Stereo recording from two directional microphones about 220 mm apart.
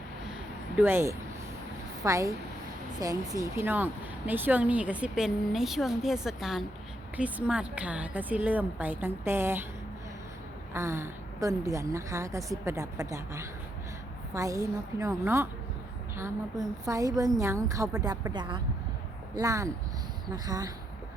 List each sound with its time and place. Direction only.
0.8 s a woman's voice: 10° right (ahead or behind)
10.8 s a woman's voice: 10° right (ahead or behind)